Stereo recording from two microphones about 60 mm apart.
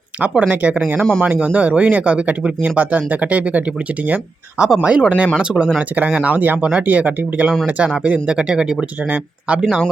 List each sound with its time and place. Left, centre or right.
0.2 s speech: right